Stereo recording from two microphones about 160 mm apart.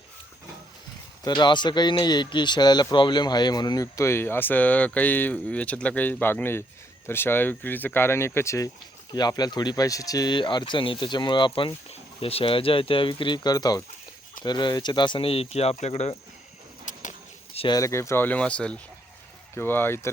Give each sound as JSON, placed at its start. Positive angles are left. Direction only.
{"t": 1.2, "sound": "a man's voice", "side_deg": 25}
{"t": 16.8, "sound": "a sound", "side_deg": 50}
{"t": 17.7, "sound": "speech", "side_deg": 20}